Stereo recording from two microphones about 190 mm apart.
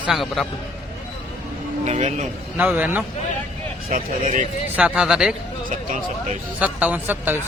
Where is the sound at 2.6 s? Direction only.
10° right (ahead or behind).